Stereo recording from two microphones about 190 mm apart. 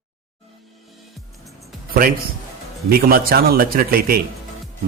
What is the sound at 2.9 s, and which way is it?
A man's voice, 50° right (ahead or behind).